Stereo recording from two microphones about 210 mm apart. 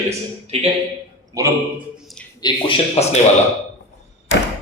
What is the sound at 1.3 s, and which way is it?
Speech, 15° right (ahead or behind).